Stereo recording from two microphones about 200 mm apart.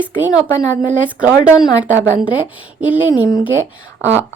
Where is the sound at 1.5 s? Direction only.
5° right (ahead or behind).